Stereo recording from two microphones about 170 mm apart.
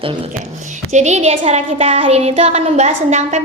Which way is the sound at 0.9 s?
40° right (ahead or behind).